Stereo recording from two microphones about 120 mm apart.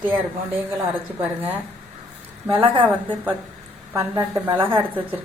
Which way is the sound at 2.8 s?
15° right (ahead or behind).